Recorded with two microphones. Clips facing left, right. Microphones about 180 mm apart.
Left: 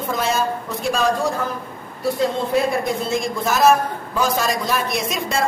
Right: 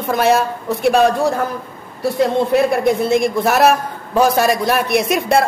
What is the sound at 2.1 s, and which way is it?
A man's voice, 65° right (ahead or behind).